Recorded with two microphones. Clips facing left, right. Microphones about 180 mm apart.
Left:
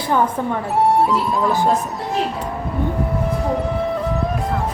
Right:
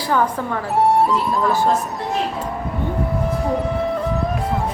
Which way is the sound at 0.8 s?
Centre (ahead or behind).